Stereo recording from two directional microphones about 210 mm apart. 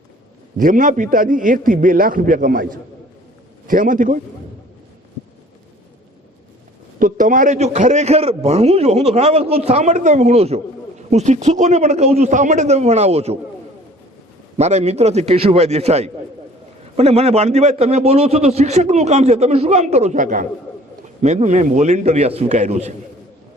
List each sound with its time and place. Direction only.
0.5 s a man's voice: 40° right (ahead or behind)
7.0 s a man's voice: 40° right (ahead or behind)
14.5 s a man's voice: 30° right (ahead or behind)